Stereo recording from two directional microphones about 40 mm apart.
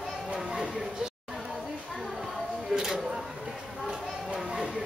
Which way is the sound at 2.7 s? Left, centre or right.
Centre.